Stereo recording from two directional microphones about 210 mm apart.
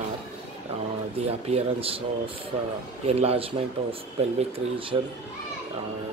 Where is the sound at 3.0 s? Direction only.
30° right (ahead or behind).